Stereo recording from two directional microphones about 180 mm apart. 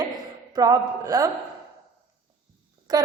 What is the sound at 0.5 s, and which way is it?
Speech, 20° right (ahead or behind).